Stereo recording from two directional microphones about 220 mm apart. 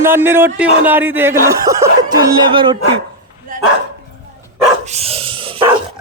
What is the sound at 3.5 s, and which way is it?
Dog, 40° right (ahead or behind).